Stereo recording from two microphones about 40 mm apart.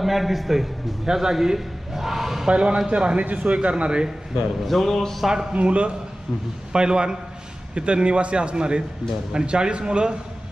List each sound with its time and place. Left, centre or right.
0.0 s a man's voice: centre
2.4 s a man's voice: right
4.6 s a man's voice: centre
5.5 s a man's voice: right
6.7 s a man's voice: right